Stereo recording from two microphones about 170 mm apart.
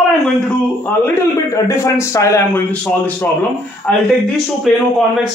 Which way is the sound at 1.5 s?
15° left (ahead or behind).